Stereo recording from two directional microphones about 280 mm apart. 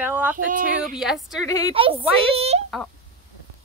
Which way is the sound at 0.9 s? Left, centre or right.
Centre.